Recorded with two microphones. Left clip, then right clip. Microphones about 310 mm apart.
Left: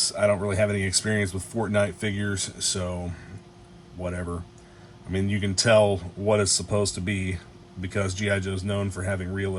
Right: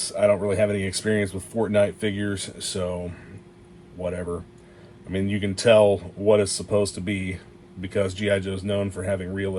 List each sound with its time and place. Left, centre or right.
0.0 s speech: left
4.0 s speech: centre